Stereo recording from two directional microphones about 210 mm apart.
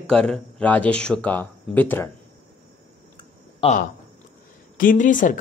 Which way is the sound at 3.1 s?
25° left (ahead or behind).